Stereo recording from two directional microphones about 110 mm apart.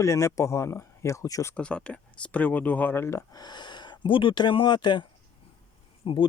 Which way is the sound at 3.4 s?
40° left (ahead or behind).